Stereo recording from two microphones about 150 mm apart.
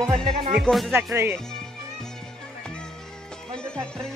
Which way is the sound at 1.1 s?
15° right (ahead or behind).